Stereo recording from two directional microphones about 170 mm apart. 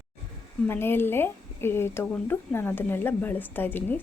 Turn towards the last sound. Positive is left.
turn(degrees=10)  # may be behind; listen again after turning